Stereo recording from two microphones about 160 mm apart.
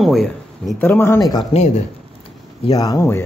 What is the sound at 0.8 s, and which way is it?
Speech, 15° left (ahead or behind).